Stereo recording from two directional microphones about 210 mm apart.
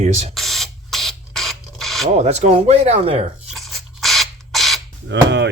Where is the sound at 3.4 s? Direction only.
Centre (ahead or behind).